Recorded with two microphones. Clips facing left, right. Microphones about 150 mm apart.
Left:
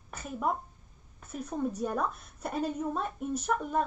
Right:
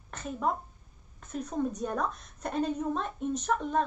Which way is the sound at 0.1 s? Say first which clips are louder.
Right 1 dB; 10° left (ahead or behind).